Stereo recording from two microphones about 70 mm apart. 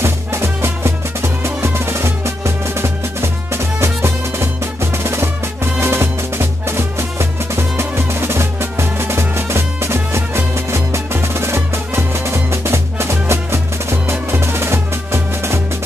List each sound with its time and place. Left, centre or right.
0.0 s music: right